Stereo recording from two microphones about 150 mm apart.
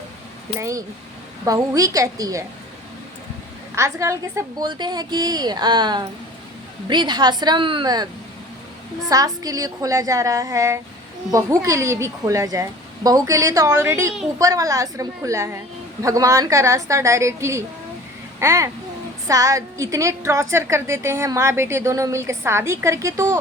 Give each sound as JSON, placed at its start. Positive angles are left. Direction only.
{"t": 1.5, "sound": "a woman's voice", "side_deg": -25}
{"t": 3.8, "sound": "a woman's voice", "side_deg": -20}
{"t": 9.0, "sound": "a woman's voice", "side_deg": -25}